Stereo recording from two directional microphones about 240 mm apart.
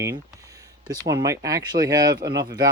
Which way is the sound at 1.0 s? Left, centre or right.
Centre.